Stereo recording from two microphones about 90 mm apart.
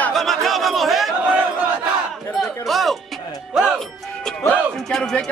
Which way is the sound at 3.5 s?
5° right (ahead or behind).